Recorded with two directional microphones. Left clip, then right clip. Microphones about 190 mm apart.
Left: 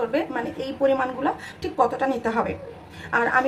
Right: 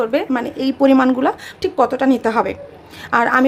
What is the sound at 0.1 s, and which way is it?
Speech, 60° right (ahead or behind).